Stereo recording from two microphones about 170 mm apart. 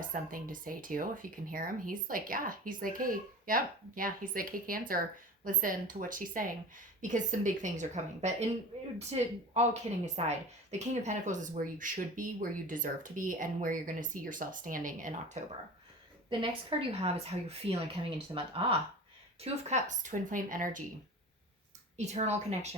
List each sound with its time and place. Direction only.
0.0 s a woman's voice: 55° right (ahead or behind)
16.4 s a woman's voice: 35° right (ahead or behind); by 20.8 s 50° right (ahead or behind)
21.9 s a woman's voice: 40° right (ahead or behind)